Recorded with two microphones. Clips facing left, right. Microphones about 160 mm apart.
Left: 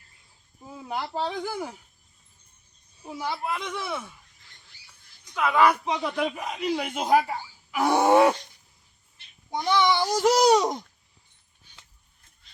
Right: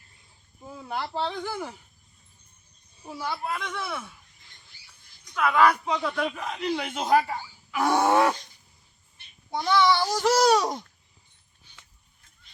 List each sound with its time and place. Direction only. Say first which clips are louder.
0.8 s a man's voice: even; 10° left (ahead or behind)
3.2 s a child's voice: left 1 dB; 20° left (ahead or behind)
5.3 s a man's voice: even; 15° left (ahead or behind)
9.6 s a man's voice: right 1 dB; 15° left (ahead or behind)